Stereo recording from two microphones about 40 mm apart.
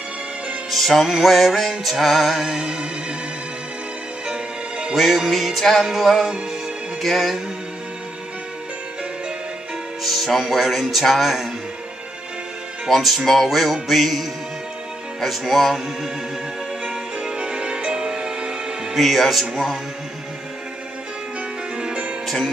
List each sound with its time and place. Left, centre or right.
0.7 s music: centre
2.6 s music: right
4.3 s music: right
4.9 s music: centre
10.0 s music: centre
12.8 s music: centre
17.4 s music: right
18.9 s music: centre
21.7 s music: right